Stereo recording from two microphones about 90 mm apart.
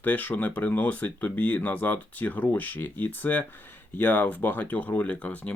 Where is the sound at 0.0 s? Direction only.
20° left (ahead or behind).